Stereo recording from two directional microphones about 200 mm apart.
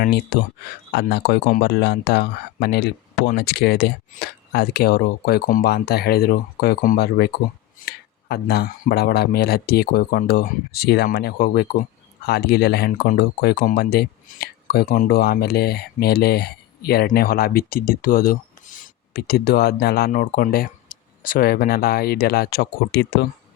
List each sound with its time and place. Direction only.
0.0 s speech: 50° left (ahead or behind)